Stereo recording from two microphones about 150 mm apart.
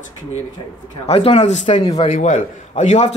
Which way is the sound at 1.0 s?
40° left (ahead or behind).